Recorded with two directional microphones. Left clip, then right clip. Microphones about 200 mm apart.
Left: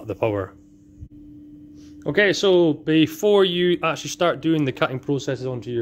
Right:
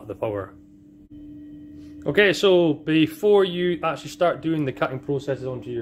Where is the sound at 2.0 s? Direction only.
20° left (ahead or behind).